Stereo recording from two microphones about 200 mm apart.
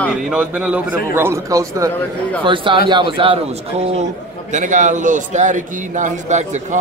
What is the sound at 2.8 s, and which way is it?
A man's voice, 25° right (ahead or behind).